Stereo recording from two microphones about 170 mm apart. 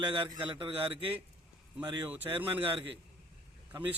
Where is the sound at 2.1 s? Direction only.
10° right (ahead or behind).